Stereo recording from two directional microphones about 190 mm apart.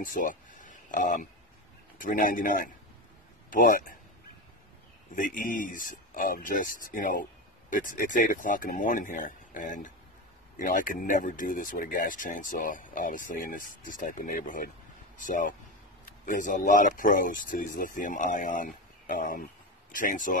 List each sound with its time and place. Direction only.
0.0 s a sound: 45° left (ahead or behind)
2.0 s speech: 45° left (ahead or behind)
5.1 s speech: 45° left (ahead or behind)